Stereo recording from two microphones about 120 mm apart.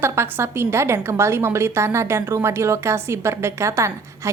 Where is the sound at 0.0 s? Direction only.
20° right (ahead or behind).